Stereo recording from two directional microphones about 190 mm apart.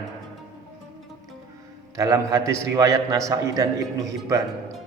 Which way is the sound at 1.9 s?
15° right (ahead or behind).